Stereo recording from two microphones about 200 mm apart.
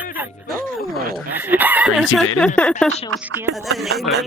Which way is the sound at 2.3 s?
5° left (ahead or behind).